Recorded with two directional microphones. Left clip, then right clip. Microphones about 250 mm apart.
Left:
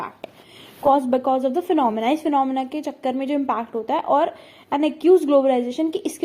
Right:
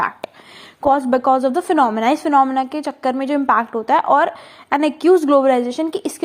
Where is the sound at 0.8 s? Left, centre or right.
Right.